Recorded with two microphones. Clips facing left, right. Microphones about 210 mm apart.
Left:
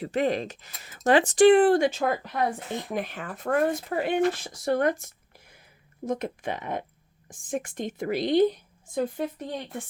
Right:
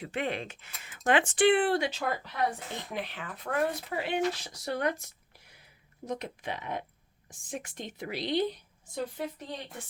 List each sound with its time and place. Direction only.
0.0 s speech: 40° left (ahead or behind)